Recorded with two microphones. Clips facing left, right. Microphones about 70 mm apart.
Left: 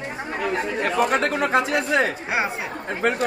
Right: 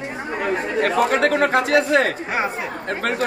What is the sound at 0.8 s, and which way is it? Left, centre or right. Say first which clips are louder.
Speech: right 4 dB; right.